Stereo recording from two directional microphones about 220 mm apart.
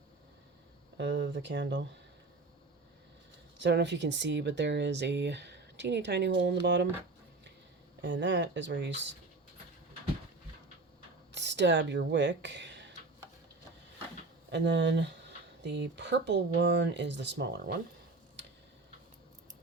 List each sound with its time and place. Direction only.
0.9 s speech: 50° right (ahead or behind)
3.6 s speech: 55° right (ahead or behind)
8.0 s speech: 55° right (ahead or behind)
11.3 s speech: 50° right (ahead or behind)
14.5 s speech: 50° right (ahead or behind)